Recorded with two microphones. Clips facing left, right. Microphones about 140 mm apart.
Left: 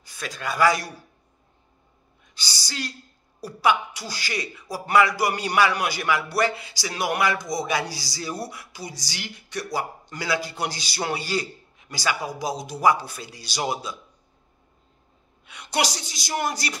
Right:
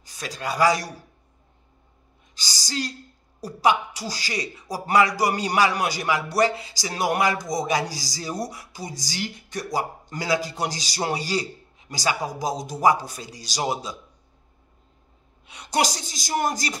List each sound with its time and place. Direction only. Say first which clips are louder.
0.0 s speech: right 1 dB; 35° right (ahead or behind)
2.3 s speech: right 4 dB; 40° right (ahead or behind)
15.4 s speech: right 2 dB; 35° right (ahead or behind)